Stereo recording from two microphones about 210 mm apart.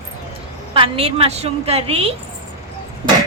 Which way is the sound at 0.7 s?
25° right (ahead or behind).